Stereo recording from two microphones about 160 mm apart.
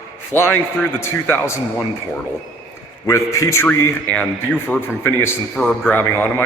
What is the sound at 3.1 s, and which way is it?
A man's voice, 20° left (ahead or behind).